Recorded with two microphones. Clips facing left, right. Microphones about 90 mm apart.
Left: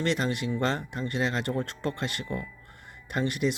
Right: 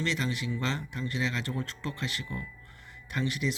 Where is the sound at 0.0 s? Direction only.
55° left (ahead or behind).